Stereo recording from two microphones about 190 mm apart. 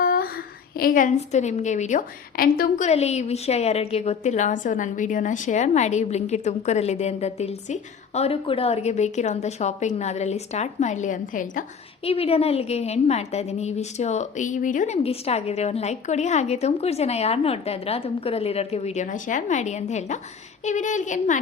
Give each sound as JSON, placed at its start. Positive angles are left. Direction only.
{"t": 0.0, "sound": "a woman's voice", "side_deg": 50}
{"t": 12.0, "sound": "a woman's voice", "side_deg": 30}